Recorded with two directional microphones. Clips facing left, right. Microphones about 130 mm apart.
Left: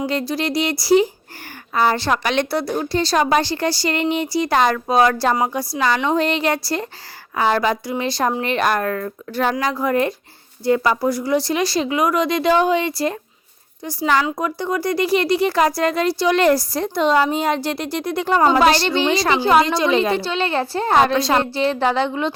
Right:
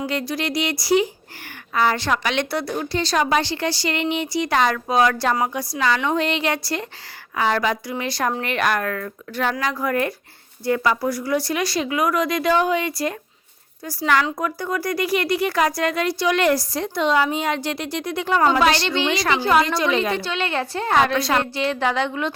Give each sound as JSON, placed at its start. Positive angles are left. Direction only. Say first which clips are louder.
{"t": 0.0, "sound": "speech", "louder": "left 3 dB", "side_deg": 30}
{"t": 9.8, "sound": "speech", "louder": "left 4 dB", "side_deg": 25}